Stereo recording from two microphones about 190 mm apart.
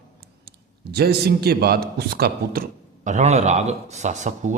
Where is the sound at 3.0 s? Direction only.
35° right (ahead or behind).